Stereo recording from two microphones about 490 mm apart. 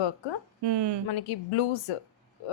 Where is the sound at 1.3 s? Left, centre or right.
Left.